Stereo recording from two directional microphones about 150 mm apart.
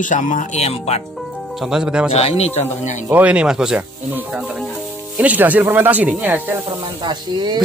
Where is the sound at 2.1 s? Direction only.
45° left (ahead or behind).